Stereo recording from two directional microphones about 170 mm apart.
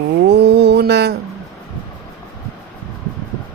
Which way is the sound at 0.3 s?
90° right.